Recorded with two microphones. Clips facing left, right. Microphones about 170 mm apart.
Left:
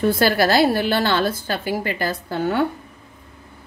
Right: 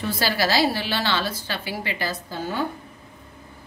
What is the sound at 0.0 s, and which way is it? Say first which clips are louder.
A woman's voice: left 7 dB; 50° left (ahead or behind).